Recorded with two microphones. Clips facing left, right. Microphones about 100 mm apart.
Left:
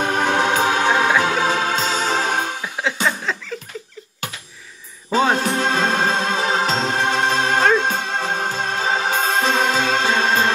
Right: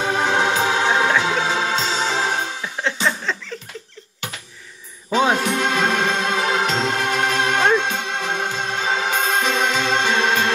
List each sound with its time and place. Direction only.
0.0 s music: 50° left (ahead or behind)
0.8 s music: 5° left (ahead or behind)
1.4 s music: 50° left (ahead or behind)
2.6 s music: 5° left (ahead or behind)
5.3 s music: 35° left (ahead or behind)